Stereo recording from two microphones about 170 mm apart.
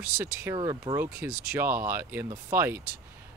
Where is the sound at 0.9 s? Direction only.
10° right (ahead or behind).